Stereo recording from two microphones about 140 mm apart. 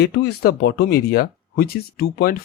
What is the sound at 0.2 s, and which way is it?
Speech, 90° left.